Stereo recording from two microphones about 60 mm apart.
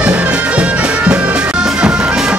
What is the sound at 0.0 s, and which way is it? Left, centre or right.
Music, right.